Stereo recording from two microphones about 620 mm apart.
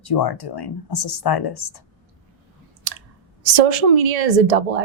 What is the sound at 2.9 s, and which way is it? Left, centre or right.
Speech, right.